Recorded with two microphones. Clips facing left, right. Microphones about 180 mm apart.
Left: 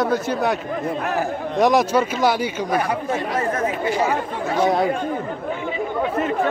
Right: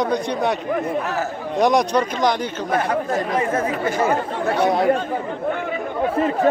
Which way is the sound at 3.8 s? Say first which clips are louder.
Even; 45° right (ahead or behind).